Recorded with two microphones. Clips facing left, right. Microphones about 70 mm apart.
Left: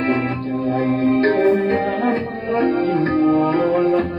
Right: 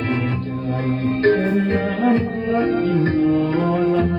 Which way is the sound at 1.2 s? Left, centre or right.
Left.